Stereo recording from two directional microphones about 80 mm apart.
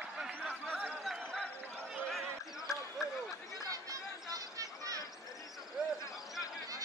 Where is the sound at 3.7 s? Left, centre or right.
Right.